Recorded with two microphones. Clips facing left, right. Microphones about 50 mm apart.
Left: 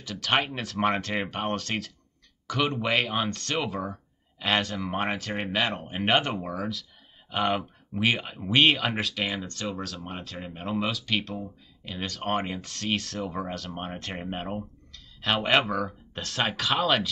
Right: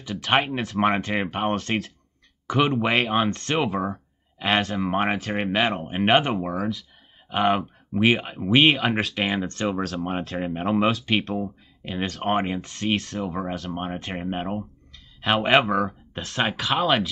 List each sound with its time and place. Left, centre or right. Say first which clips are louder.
0.0 s speech: right 4 dB; centre
0.6 s speech: right 5 dB; centre
0.8 s speech: right 3 dB; centre
3.8 s a sound: right 6 dB; right
4.6 s speech: right 4 dB; centre
4.8 s speech: right 5 dB; right
7.3 s speech: right 5 dB; centre
16.3 s speech: right 3 dB; centre